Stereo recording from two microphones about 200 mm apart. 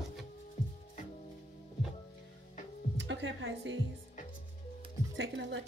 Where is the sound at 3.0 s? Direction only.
65° right (ahead or behind).